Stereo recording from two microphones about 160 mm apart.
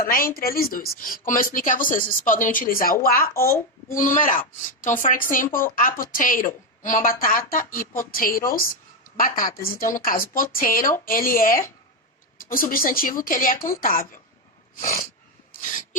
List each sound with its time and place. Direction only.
0.0 s speech: 65° left (ahead or behind)